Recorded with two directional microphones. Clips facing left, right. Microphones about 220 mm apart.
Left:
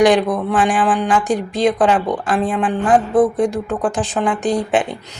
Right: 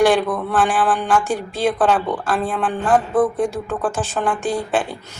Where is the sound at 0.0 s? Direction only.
15° left (ahead or behind).